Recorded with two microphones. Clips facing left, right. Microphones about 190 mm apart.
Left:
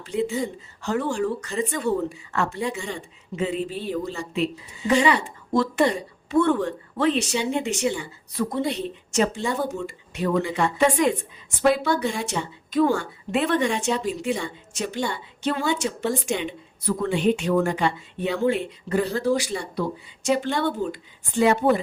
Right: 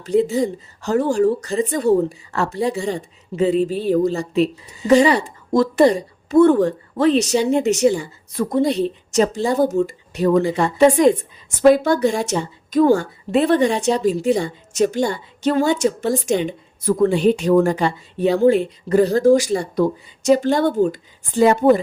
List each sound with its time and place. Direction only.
0.0 s a woman's voice: 40° right (ahead or behind)